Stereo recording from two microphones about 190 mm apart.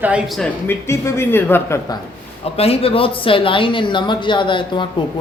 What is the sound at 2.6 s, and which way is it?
Speech, 30° left (ahead or behind).